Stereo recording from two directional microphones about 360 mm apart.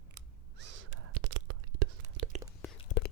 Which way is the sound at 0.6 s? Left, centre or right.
Right.